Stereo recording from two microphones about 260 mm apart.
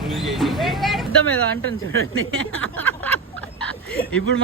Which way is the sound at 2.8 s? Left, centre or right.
Centre.